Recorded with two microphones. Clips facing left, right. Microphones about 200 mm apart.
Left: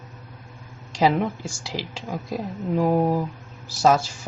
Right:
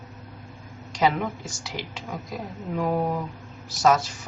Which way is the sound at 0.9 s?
30° left (ahead or behind).